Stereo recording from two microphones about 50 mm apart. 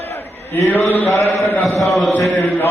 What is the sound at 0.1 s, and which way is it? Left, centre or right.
A man's voice, left.